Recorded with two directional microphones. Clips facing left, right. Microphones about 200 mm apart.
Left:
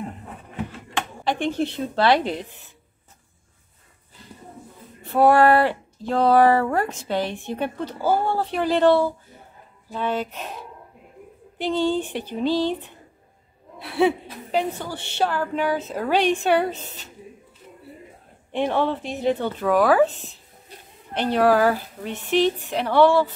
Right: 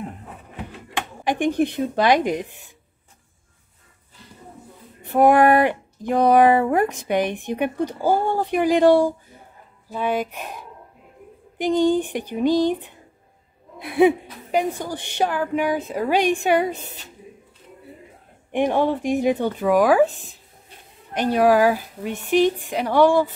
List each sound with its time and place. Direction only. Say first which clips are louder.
0.7 s speech: even; 15° right (ahead or behind)
5.0 s speech: right 1 dB; 15° right (ahead or behind)
18.5 s speech: right 3 dB; 15° right (ahead or behind)